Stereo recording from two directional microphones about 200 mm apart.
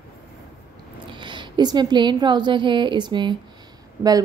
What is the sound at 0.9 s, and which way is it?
A woman's voice, 25° right (ahead or behind).